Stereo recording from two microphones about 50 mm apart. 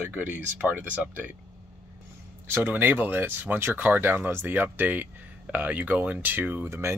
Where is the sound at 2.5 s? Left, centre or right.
Right.